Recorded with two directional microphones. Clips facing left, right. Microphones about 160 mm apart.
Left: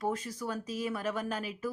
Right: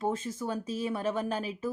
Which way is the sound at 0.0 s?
25° right (ahead or behind).